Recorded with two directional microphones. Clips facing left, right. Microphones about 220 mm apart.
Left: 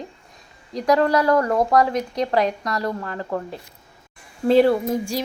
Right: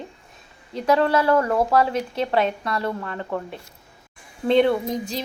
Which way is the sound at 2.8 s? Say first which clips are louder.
Left 1 dB; 30° left (ahead or behind).